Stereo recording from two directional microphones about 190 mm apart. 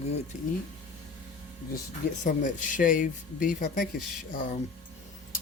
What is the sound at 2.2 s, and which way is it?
Speech, 40° left (ahead or behind).